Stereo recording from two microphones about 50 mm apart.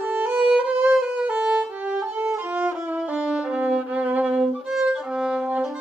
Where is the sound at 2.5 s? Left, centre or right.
Right.